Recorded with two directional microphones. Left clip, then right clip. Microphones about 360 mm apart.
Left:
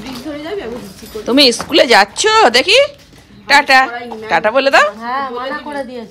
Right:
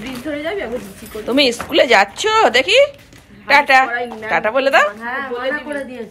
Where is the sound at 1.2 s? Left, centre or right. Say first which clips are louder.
Left 5 dB; centre.